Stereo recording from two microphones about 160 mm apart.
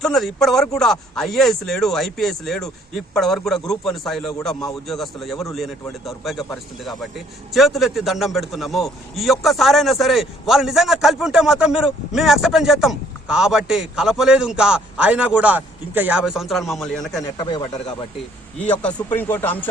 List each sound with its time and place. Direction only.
0.0 s a man's voice: centre (ahead or behind)
17.3 s speech: 25° left (ahead or behind)
18.6 s speech: 10° left (ahead or behind)